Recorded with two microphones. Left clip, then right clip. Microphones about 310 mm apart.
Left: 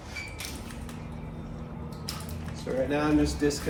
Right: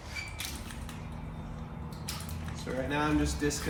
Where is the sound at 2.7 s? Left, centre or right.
Centre.